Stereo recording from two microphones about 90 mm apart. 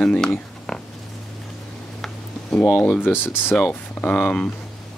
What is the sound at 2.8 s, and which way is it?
Speech, 20° left (ahead or behind).